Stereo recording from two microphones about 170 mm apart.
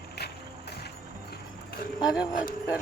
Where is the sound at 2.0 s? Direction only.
5° right (ahead or behind).